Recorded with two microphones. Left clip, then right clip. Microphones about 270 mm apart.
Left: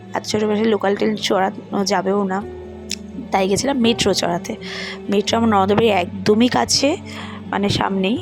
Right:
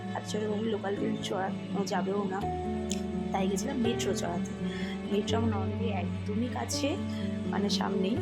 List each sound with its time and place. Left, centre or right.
0.1 s speech: left